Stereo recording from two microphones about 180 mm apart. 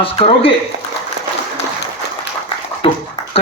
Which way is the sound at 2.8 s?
30° left (ahead or behind).